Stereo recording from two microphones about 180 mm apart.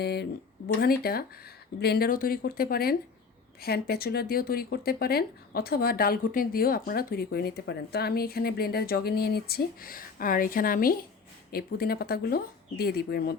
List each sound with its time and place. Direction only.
0.0 s speech: 65° left (ahead or behind)